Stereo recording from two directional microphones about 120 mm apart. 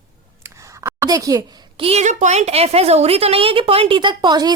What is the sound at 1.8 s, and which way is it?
A woman's voice, 60° right (ahead or behind).